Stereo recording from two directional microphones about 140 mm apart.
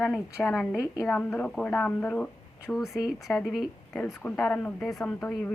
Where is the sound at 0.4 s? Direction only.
5° left (ahead or behind).